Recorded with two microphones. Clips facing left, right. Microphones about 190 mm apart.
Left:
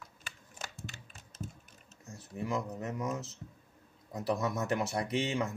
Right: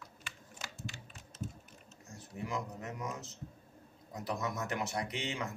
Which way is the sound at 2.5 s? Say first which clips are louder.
Left 5 dB; 30° left (ahead or behind).